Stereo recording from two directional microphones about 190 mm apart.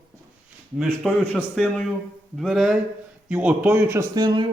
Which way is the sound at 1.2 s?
5° left (ahead or behind).